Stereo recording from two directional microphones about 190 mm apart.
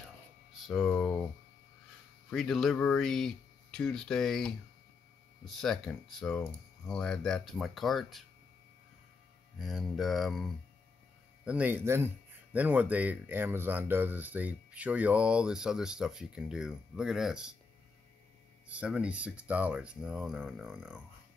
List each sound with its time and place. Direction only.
0.5 s speech: centre (ahead or behind)
2.3 s speech: centre (ahead or behind)
9.6 s speech: centre (ahead or behind)
18.7 s speech: 5° right (ahead or behind)